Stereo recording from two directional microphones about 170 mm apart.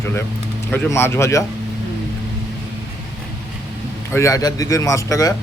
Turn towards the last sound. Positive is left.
turn(degrees=20)  # may be behind; listen again after turning